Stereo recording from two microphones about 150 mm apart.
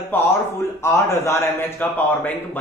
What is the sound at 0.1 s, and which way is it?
Speech, 15° left (ahead or behind).